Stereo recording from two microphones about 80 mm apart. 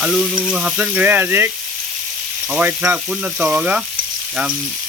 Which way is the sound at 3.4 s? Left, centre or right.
Centre.